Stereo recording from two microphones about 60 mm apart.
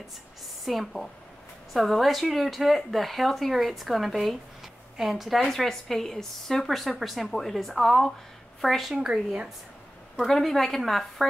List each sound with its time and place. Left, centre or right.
0.7 s a woman's voice: centre
8.9 s speech: centre
10.1 s a woman's voice: centre